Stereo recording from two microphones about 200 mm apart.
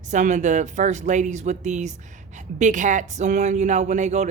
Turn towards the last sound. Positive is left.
turn(degrees=-35)  # may be behind; listen again after turning